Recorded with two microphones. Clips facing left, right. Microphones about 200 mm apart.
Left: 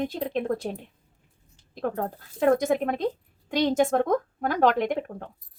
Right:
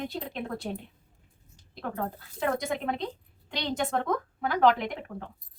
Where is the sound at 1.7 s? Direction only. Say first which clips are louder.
Left 5 dB; 45° left (ahead or behind).